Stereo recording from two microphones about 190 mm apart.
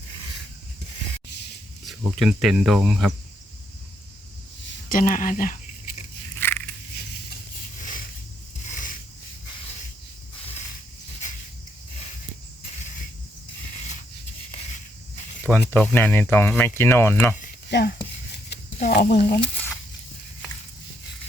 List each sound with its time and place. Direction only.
1.8 s speech: centre (ahead or behind)
4.9 s speech: 45° left (ahead or behind)
6.4 s a sound: 10° left (ahead or behind)
8.7 s a sound: 45° left (ahead or behind)
15.4 s speech: 10° left (ahead or behind)
17.7 s speech: 65° left (ahead or behind)